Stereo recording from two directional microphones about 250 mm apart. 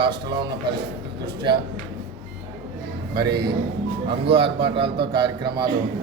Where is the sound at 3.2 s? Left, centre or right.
Centre.